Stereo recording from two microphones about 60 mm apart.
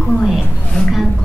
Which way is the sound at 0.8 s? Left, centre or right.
Centre.